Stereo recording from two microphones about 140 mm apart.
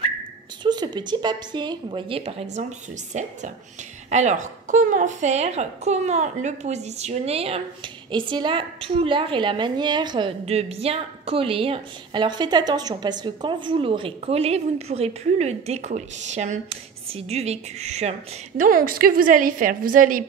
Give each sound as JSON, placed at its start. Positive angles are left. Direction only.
{"t": 0.7, "sound": "a woman's voice", "side_deg": -30}
{"t": 8.1, "sound": "a woman's voice", "side_deg": -35}
{"t": 10.4, "sound": "a woman's voice", "side_deg": -45}
{"t": 18.6, "sound": "a woman's voice", "side_deg": -85}